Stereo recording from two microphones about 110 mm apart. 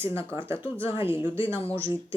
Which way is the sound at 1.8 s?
55° left (ahead or behind).